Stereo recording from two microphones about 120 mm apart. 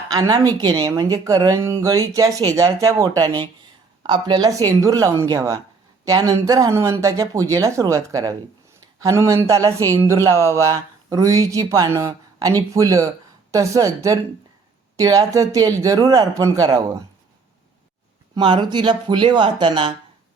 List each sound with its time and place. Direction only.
0.1 s a woman's voice: 35° right (ahead or behind)
18.3 s speech: 40° right (ahead or behind)